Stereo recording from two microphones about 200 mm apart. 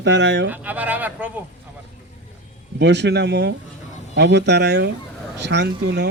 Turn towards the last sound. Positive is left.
turn(degrees=-55)  # may be behind; listen again after turning